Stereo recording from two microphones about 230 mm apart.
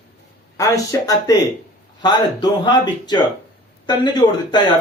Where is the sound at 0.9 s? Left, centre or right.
Centre.